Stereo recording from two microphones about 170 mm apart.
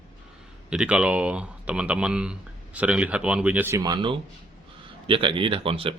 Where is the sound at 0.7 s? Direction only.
5° right (ahead or behind).